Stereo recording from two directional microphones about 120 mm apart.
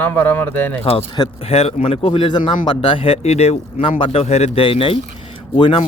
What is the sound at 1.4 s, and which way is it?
Speech, 60° left (ahead or behind).